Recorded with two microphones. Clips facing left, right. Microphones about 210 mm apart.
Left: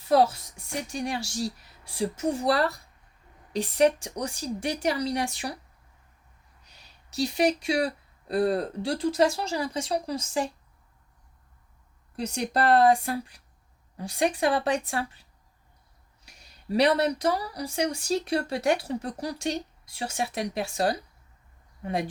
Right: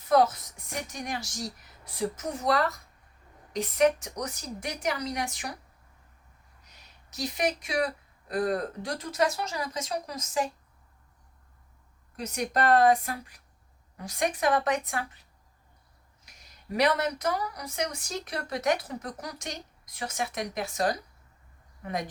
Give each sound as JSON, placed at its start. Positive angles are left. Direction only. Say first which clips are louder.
{"t": 0.1, "sound": "speech", "louder": "left 1 dB", "side_deg": 30}
{"t": 6.7, "sound": "speech", "louder": "left 1 dB", "side_deg": 30}
{"t": 12.1, "sound": "speech", "louder": "left 2 dB", "side_deg": 30}
{"t": 16.2, "sound": "speech", "louder": "left 7 dB", "side_deg": 30}